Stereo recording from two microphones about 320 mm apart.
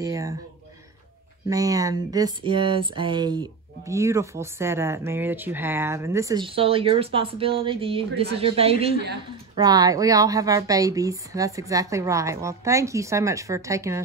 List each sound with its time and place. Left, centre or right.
0.0 s speech: centre
1.5 s speech: centre